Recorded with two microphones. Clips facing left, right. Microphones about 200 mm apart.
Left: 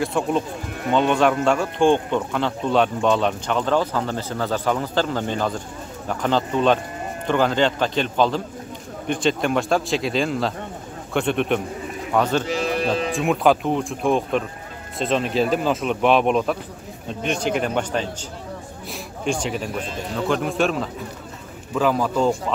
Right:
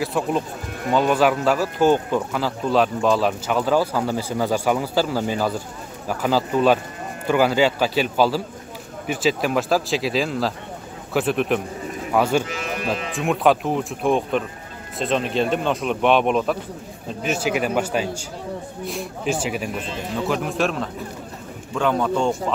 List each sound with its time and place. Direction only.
0.0 s speech: centre (ahead or behind)
12.4 s sheep: 30° left (ahead or behind)
12.8 s speech: centre (ahead or behind)